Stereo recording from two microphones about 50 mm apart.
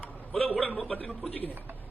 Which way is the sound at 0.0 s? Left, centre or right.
Left.